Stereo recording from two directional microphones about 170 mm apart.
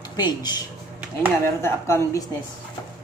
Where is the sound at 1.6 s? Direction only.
15° left (ahead or behind).